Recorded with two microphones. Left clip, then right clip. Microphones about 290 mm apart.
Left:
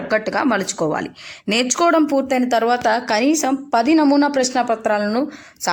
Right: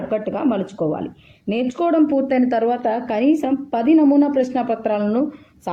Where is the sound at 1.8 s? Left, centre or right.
Right.